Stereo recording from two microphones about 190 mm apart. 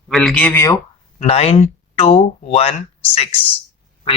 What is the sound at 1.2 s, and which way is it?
Speech, 30° left (ahead or behind).